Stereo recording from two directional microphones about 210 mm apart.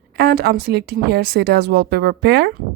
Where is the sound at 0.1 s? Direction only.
50° right (ahead or behind).